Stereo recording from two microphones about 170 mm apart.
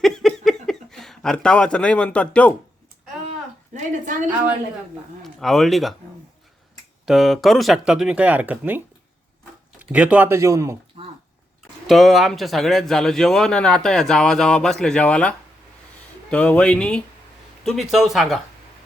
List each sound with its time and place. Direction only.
0.0 s a sound: centre (ahead or behind)
3.8 s a woman's voice: 45° right (ahead or behind)
5.2 s speech: centre (ahead or behind)
7.0 s speech: centre (ahead or behind)
9.9 s speech: 10° right (ahead or behind)
11.0 s a sound: 35° right (ahead or behind)
11.9 s speech: centre (ahead or behind)